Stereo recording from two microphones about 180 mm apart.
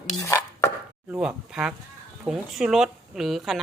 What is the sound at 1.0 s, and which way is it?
Speech, 5° right (ahead or behind).